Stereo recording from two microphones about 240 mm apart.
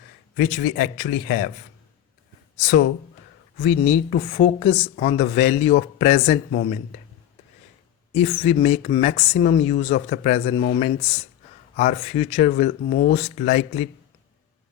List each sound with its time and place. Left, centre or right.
0.3 s speech: left
3.6 s speech: left
8.1 s speech: left